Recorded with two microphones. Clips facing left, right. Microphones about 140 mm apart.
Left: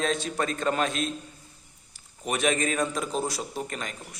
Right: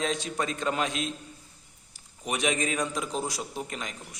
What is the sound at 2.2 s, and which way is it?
A man's voice, 15° right (ahead or behind).